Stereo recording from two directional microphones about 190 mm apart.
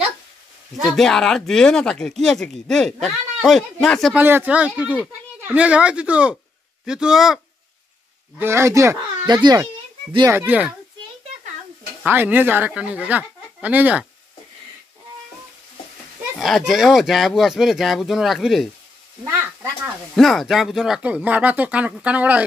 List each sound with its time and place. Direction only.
0.9 s speech: 5° left (ahead or behind)
4.2 s speech: 10° right (ahead or behind)
8.4 s speech: 15° right (ahead or behind)
12.0 s speech: 10° right (ahead or behind)
16.3 s speech: centre (ahead or behind)
20.2 s speech: centre (ahead or behind)